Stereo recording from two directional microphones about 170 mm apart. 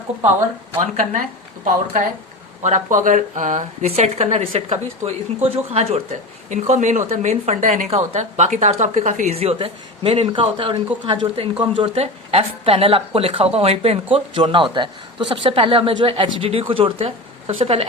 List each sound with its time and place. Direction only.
0.8 s a woman's voice: 50° right (ahead or behind)